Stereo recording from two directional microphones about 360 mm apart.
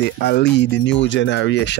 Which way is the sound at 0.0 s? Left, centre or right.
Left.